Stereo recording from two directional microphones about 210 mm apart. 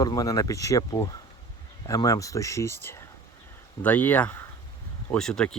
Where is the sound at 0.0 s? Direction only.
15° left (ahead or behind).